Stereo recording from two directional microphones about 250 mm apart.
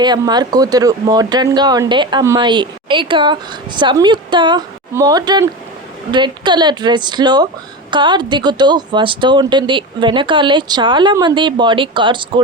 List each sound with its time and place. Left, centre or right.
0.0 s speech: centre